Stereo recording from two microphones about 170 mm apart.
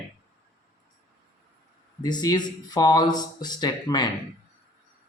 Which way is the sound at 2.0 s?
25° left (ahead or behind).